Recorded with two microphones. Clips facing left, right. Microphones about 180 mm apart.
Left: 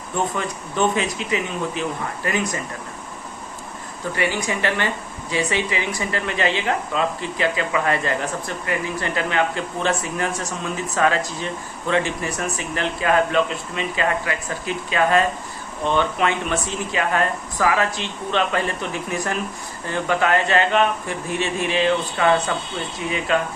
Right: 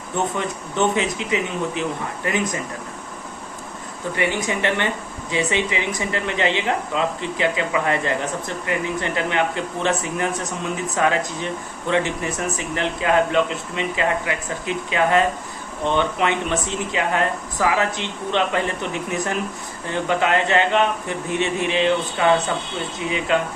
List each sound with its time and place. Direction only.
0.3 s speech: 20° right (ahead or behind)
4.1 s speech: 20° right (ahead or behind)
23.3 s speech: 20° right (ahead or behind)